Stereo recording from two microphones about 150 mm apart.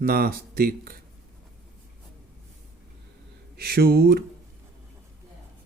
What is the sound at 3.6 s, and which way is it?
Speech, 90° right.